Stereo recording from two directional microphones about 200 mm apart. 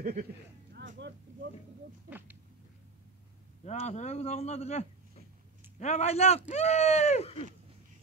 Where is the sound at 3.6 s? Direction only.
35° left (ahead or behind).